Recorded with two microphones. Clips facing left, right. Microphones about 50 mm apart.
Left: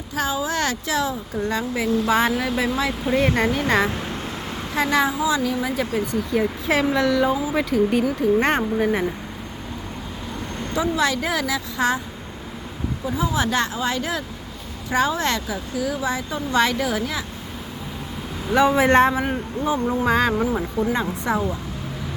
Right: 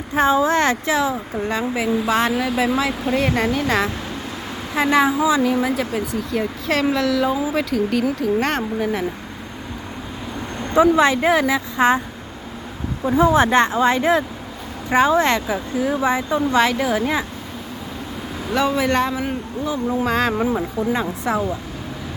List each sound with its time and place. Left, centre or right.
0.1 s speech: right; by 2.1 s centre
2.1 s speech: centre
4.7 s speech: centre
5.6 s speech: centre
10.8 s speech: right
13.1 s speech: right
16.3 s speech: centre
18.4 s speech: centre
18.8 s speech: left
19.9 s speech: centre